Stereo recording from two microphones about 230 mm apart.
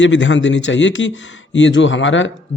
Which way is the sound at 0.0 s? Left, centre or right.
Left.